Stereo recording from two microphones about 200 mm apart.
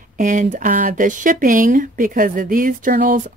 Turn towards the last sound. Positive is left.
turn(degrees=-45)  # may be behind; listen again after turning